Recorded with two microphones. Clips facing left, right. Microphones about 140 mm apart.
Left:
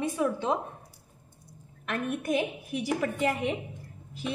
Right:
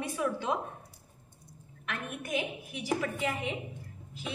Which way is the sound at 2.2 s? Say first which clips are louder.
Left 3 dB; 40° left (ahead or behind).